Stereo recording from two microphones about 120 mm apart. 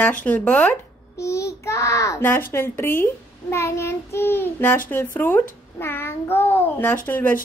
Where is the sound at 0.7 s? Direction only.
25° left (ahead or behind).